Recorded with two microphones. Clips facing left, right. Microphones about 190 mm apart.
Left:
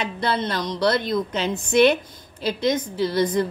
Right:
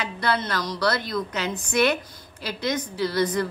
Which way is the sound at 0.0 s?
25° left (ahead or behind).